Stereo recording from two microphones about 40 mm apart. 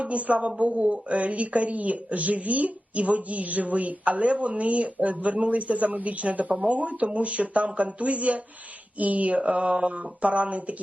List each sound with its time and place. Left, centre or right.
0.0 s a woman's voice: right